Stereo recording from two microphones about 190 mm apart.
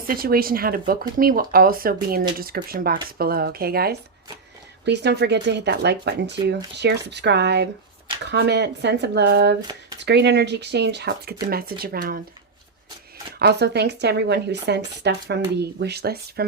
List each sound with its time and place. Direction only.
0.1 s speech: 50° right (ahead or behind)
13.4 s speech: 60° right (ahead or behind)